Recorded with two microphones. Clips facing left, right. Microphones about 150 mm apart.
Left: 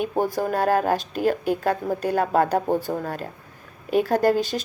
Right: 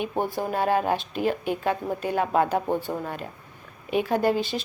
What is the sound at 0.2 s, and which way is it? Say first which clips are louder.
A woman's voice: left 3 dB; 40° left (ahead or behind).